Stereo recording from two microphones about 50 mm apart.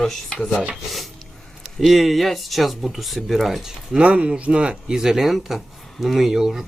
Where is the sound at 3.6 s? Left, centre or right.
Centre.